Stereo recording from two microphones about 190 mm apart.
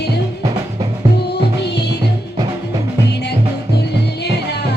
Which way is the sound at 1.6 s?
60° left (ahead or behind).